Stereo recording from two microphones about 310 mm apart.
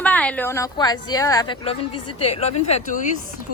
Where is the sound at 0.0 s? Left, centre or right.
Centre.